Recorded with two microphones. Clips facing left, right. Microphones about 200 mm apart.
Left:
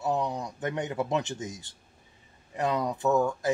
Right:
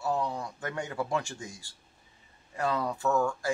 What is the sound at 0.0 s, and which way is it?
A man's voice, 20° left (ahead or behind).